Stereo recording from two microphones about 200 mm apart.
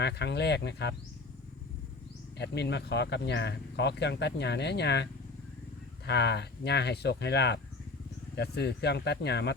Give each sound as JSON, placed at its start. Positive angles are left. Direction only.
{"t": 0.0, "sound": "speech", "side_deg": 55}
{"t": 2.4, "sound": "speech", "side_deg": 60}
{"t": 6.1, "sound": "speech", "side_deg": 55}